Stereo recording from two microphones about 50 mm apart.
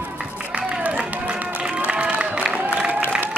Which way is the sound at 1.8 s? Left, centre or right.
Right.